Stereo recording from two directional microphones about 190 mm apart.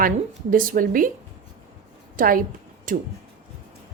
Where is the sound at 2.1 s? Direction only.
45° right (ahead or behind).